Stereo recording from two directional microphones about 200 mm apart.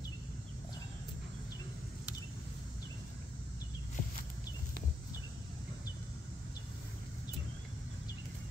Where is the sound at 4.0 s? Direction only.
40° left (ahead or behind).